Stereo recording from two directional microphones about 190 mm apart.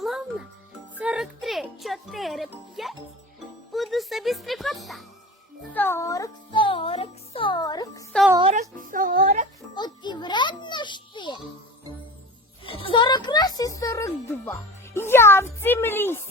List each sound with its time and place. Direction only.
0.0 s music: centre (ahead or behind)
5.7 s music: 10° left (ahead or behind)
8.8 s music: 45° right (ahead or behind)
9.7 s music: 20° left (ahead or behind)
12.6 s music: 30° left (ahead or behind); by 16.2 s 10° left (ahead or behind)